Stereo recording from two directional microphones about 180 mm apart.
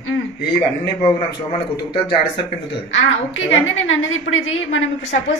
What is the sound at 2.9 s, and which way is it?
A woman's voice, 90° left.